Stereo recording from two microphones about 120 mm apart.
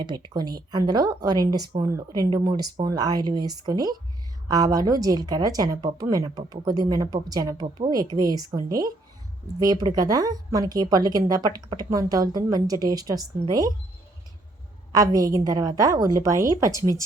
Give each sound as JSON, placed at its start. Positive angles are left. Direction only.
{"t": 0.0, "sound": "speech", "side_deg": -35}
{"t": 14.9, "sound": "speech", "side_deg": -30}